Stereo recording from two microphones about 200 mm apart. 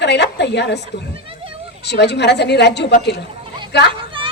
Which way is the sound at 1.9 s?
55° left (ahead or behind).